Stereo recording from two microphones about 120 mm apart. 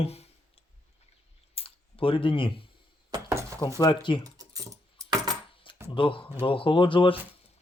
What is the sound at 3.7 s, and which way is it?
Speech, 40° left (ahead or behind).